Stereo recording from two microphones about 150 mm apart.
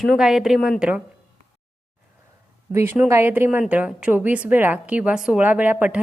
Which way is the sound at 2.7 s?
15° right (ahead or behind).